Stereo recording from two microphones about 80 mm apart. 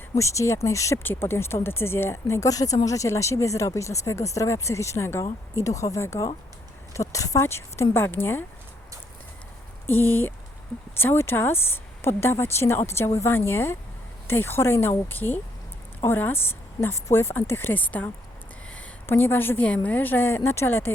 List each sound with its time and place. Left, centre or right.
0.2 s speech: left
1.0 s speech: left
7.4 s speech: left
9.8 s speech: left